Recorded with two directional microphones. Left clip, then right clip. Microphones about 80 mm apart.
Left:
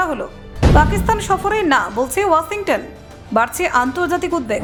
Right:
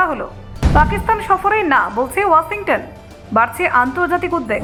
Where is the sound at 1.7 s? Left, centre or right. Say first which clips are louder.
Right 1 dB; left.